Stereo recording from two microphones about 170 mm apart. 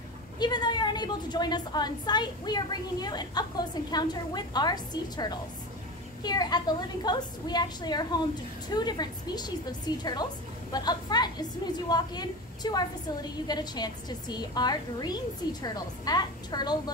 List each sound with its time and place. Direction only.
0.4 s a woman's voice: 25° left (ahead or behind)